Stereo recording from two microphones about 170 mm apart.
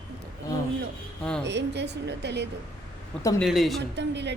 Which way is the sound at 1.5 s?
90° right.